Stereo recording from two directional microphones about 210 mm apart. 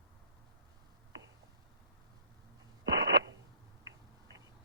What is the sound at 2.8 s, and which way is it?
Radio, 60° right (ahead or behind).